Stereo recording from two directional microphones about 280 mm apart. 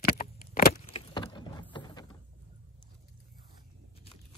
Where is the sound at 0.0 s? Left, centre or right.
Left.